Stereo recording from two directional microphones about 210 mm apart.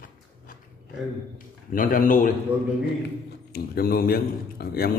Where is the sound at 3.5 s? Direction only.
45° left (ahead or behind).